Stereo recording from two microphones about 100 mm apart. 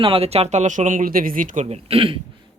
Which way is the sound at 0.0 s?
75° right (ahead or behind).